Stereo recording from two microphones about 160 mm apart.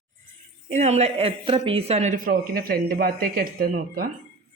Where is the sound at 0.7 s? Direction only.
45° right (ahead or behind).